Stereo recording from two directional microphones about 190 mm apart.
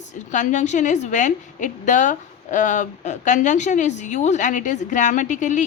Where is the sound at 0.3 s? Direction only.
40° left (ahead or behind).